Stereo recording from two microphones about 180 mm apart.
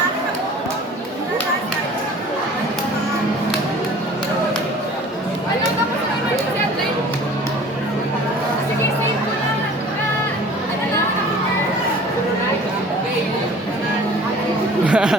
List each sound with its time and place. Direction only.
14.8 s chatter: 5° right (ahead or behind)